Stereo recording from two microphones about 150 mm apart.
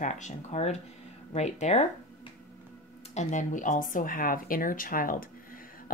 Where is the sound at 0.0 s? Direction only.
55° left (ahead or behind).